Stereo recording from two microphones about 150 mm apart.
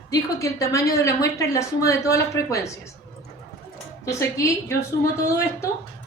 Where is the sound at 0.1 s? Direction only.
20° left (ahead or behind).